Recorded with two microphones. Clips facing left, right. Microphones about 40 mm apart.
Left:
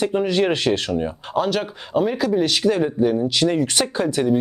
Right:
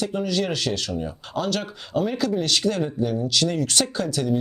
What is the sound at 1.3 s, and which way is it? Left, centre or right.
Speech, centre.